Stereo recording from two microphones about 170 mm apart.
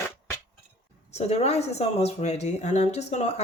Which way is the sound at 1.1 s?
40° left (ahead or behind).